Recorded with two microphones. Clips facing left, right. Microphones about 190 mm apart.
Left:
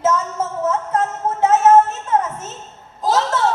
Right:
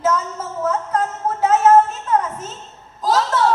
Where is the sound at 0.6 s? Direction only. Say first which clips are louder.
Right 1 dB; 25° left (ahead or behind).